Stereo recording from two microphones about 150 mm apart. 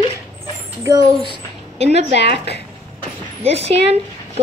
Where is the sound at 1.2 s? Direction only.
40° right (ahead or behind).